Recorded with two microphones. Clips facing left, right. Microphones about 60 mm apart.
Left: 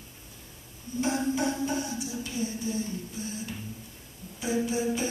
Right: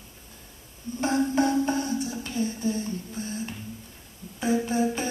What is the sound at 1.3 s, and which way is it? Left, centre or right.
Speech, right.